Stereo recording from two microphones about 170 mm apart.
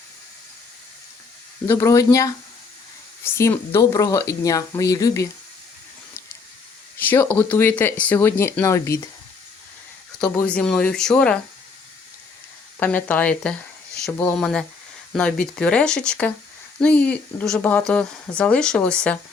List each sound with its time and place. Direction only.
1.6 s speech: 15° left (ahead or behind)
7.0 s speech: 10° left (ahead or behind)
10.4 s speech: 5° left (ahead or behind)
12.8 s speech: 10° left (ahead or behind)